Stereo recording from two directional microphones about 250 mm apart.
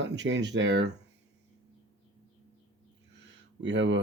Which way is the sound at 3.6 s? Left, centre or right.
Right.